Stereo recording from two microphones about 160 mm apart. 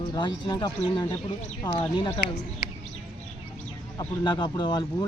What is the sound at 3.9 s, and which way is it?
Speech, 30° left (ahead or behind).